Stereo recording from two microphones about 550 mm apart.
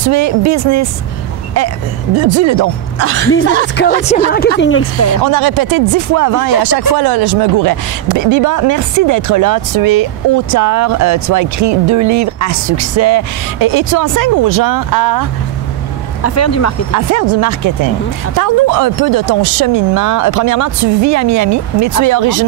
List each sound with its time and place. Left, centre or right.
0.0 s speech: right
2.1 s speech: right
3.7 s speech: centre
5.2 s speech: right
16.2 s speech: left
16.9 s speech: right